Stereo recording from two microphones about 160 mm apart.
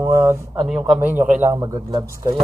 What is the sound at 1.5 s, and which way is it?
Speech, 25° right (ahead or behind).